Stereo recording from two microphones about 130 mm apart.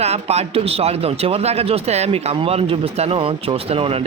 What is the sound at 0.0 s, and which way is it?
A man's voice, 55° right (ahead or behind).